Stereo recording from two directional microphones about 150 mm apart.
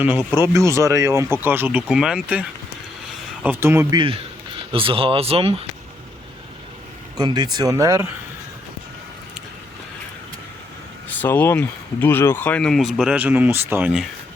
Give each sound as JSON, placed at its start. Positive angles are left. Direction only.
{"t": 0.3, "sound": "speech", "side_deg": -20}
{"t": 3.4, "sound": "speech", "side_deg": -15}
{"t": 3.9, "sound": "speech", "side_deg": -35}
{"t": 7.2, "sound": "speech", "side_deg": -25}
{"t": 11.1, "sound": "speech", "side_deg": 10}